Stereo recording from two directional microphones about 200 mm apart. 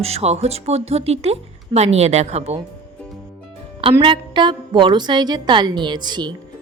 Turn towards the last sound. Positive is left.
turn(degrees=-20)  # may be behind; listen again after turning